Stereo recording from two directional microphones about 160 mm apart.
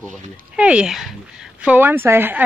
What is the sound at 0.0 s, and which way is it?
Speech, 5° right (ahead or behind).